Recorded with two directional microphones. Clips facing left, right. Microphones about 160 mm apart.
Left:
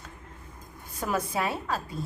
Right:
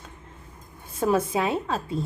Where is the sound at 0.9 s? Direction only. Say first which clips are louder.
Right 6 dB; 25° right (ahead or behind).